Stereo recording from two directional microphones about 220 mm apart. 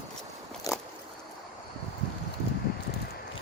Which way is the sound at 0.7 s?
15° left (ahead or behind).